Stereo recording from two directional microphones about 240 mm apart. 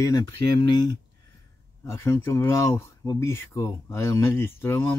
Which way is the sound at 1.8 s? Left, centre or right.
Centre.